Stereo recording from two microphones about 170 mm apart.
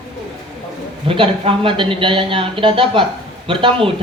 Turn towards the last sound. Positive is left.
turn(degrees=-30)  # may be behind; listen again after turning